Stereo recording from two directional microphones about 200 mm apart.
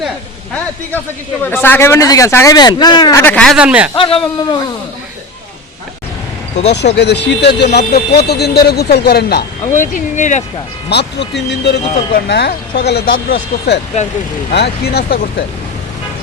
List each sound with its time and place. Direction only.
0.5 s speech: 10° left (ahead or behind); by 3.9 s 5° right (ahead or behind)
3.9 s speech: 25° left (ahead or behind)
6.6 s speech: 35° left (ahead or behind)
6.9 s speech: 60° left (ahead or behind); by 10.4 s 40° left (ahead or behind)
10.8 s speech: 60° left (ahead or behind)